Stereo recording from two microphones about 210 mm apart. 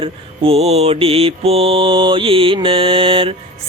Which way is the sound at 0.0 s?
25° right (ahead or behind).